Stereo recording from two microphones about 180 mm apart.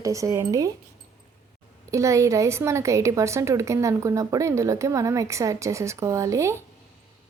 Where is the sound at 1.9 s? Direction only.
15° right (ahead or behind).